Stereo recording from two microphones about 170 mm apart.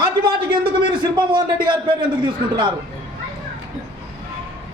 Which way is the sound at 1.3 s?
30° right (ahead or behind).